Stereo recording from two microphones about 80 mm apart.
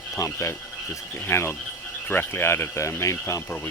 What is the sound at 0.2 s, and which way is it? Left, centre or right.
Speech, left.